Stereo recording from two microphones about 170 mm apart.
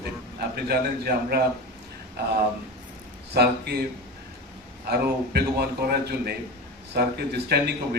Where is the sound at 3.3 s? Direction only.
70° right (ahead or behind).